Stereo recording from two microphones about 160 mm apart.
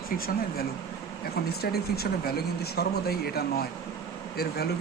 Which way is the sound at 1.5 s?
80° left.